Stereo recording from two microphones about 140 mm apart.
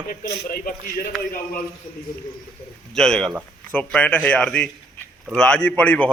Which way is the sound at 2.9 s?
5° left (ahead or behind).